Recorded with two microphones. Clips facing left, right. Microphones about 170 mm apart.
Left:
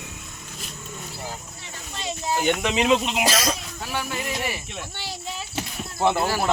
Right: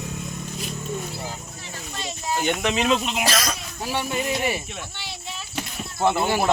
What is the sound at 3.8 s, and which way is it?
Speech, 25° right (ahead or behind).